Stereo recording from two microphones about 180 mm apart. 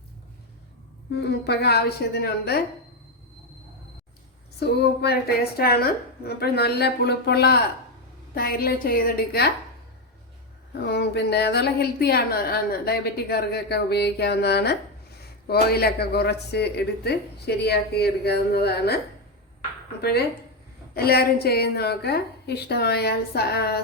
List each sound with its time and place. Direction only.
1.1 s a woman's voice: 65° left (ahead or behind)
4.6 s a woman's voice: 65° left (ahead or behind)
10.8 s a woman's voice: 65° left (ahead or behind)
20.9 s a woman's voice: 60° left (ahead or behind)